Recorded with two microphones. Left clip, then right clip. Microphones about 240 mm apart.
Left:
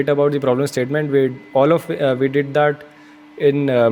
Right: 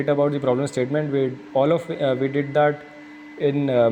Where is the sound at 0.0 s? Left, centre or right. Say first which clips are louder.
Left 4 dB; left.